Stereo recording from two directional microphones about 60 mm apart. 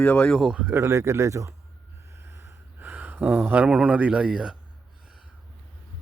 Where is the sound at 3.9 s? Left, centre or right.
Right.